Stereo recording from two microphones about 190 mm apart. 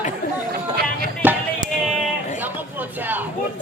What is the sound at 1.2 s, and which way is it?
Music, 10° right (ahead or behind).